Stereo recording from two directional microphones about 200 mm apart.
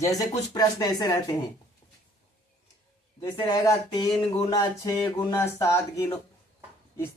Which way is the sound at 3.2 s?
15° left (ahead or behind).